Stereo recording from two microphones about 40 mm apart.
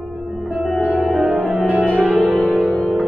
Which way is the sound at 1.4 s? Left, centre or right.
Right.